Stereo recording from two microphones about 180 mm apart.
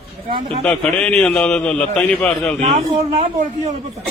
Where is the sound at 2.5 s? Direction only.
40° right (ahead or behind).